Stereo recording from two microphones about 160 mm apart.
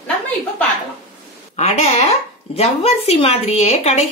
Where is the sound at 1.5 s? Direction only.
40° left (ahead or behind).